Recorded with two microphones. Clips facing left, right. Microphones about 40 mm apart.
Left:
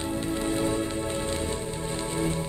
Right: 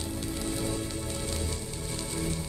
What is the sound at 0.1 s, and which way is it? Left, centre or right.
Music, left.